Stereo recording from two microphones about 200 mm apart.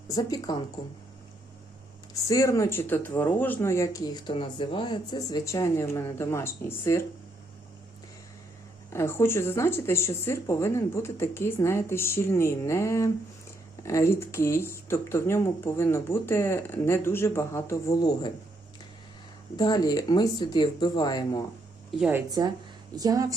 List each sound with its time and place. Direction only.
0.1 s speech: 20° left (ahead or behind)
2.2 s speech: 15° left (ahead or behind)
8.9 s speech: 15° left (ahead or behind)
19.5 s speech: 20° left (ahead or behind)
22.3 s a woman's voice: 20° right (ahead or behind)